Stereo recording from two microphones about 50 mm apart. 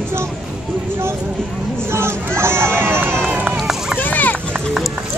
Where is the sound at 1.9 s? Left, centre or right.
Right.